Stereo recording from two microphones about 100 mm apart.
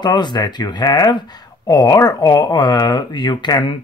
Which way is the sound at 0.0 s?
45° left (ahead or behind).